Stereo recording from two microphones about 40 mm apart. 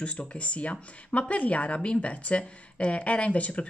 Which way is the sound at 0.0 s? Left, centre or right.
Left.